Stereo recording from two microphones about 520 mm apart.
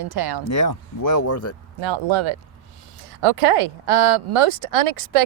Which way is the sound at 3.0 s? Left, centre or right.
Right.